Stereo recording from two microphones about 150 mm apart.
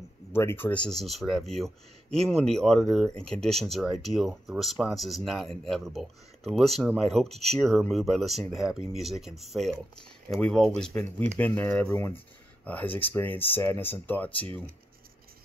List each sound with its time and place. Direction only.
0.3 s speech: 15° left (ahead or behind)
10.9 s speech: 20° left (ahead or behind)